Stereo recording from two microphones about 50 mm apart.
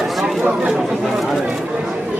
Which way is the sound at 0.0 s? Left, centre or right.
Centre.